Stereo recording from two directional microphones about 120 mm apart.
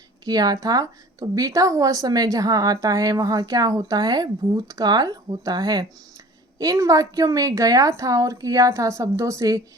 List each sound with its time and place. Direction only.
0.3 s a woman's voice: 35° right (ahead or behind)